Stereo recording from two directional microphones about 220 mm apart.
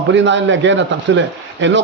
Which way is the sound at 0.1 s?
55° right (ahead or behind).